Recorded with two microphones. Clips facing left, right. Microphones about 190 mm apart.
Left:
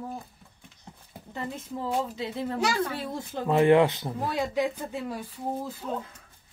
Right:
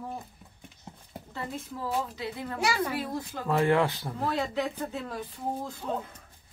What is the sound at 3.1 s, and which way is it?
Speech, 20° left (ahead or behind).